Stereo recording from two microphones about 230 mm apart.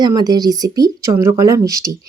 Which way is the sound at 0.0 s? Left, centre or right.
Centre.